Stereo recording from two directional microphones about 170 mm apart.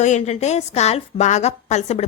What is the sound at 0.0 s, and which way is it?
A woman's voice, 40° left (ahead or behind).